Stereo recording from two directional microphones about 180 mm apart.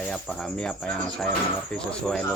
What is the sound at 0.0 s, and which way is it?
Speech, 5° left (ahead or behind).